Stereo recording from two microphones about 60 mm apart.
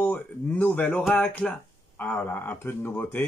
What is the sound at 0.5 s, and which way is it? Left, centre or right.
Speech, left.